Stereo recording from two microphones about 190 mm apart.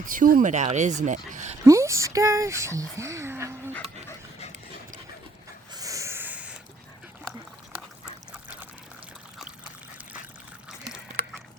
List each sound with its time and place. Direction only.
0.0 s speech: 45° right (ahead or behind)
1.6 s speech: 15° right (ahead or behind)
5.7 s owl: 20° right (ahead or behind)